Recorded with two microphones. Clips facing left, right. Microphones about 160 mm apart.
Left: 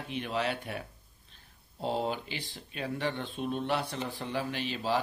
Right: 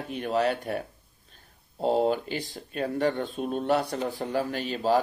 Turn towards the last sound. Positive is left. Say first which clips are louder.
# right 6 dB
turn(degrees=-45)  # may be behind; listen again after turning